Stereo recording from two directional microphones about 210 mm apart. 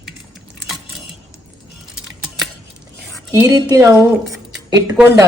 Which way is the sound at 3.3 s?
15° right (ahead or behind).